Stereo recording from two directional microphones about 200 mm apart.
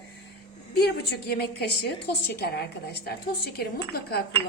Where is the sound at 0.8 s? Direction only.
55° left (ahead or behind).